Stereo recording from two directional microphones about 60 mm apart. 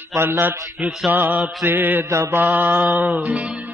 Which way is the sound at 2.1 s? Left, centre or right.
Right.